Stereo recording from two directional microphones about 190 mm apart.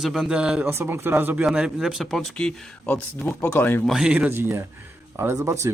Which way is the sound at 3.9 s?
5° right (ahead or behind).